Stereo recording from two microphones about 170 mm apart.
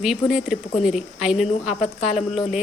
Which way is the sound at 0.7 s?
45° left (ahead or behind).